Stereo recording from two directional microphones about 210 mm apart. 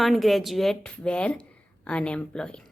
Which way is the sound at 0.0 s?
Centre (ahead or behind).